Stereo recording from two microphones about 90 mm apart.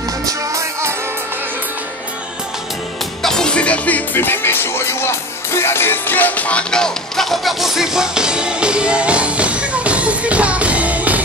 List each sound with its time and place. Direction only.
0.2 s music: 35° right (ahead or behind)
3.2 s music: 5° left (ahead or behind); by 11.2 s 15° right (ahead or behind)